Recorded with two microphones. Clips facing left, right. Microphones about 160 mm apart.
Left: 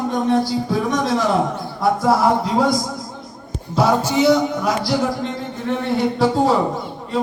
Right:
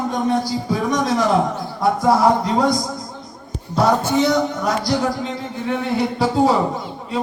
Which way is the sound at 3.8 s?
Centre (ahead or behind).